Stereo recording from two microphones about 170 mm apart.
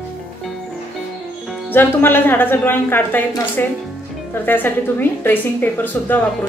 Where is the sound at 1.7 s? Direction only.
10° left (ahead or behind).